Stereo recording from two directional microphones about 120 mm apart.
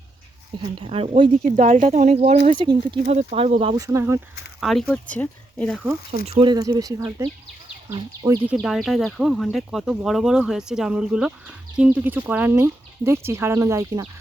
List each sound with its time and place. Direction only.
0.8 s speech: 50° right (ahead or behind)
1.5 s speech: 90° right; by 3.0 s 40° right (ahead or behind)
3.0 s speech: 65° right (ahead or behind)
3.8 s speech: 25° right (ahead or behind)
4.6 s speech: centre (ahead or behind)
4.9 s speech: 10° left (ahead or behind)
6.1 s speech: 45° right (ahead or behind)
6.6 s speech: 30° right (ahead or behind)
8.6 s speech: centre (ahead or behind); by 14.0 s 25° right (ahead or behind)